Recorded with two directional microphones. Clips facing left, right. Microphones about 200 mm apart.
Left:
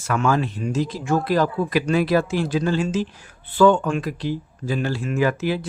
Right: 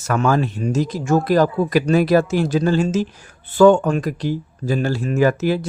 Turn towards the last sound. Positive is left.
turn(degrees=-40)  # may be behind; listen again after turning